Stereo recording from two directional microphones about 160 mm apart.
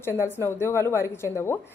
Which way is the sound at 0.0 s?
15° left (ahead or behind).